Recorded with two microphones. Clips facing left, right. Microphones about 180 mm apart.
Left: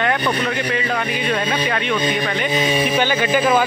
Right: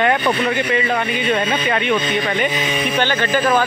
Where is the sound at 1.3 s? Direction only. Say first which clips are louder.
Right 2 dB; 5° right (ahead or behind).